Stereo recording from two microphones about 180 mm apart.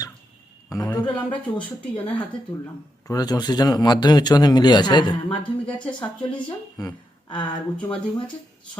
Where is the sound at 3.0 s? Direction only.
20° left (ahead or behind).